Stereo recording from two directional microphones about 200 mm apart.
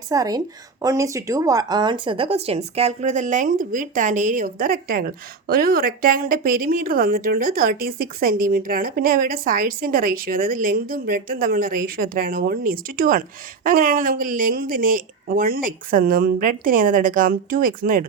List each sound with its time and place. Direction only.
0.1 s speech: 20° right (ahead or behind); by 18.0 s 45° right (ahead or behind)